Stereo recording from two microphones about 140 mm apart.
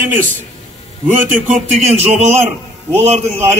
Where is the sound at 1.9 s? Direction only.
50° right (ahead or behind).